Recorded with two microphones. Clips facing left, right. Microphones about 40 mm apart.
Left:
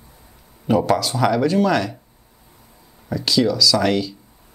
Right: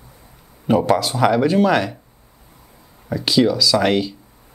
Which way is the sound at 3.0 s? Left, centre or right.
Centre.